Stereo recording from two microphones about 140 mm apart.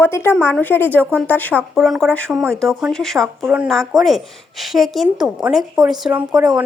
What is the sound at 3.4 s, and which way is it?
A woman's voice, 10° right (ahead or behind).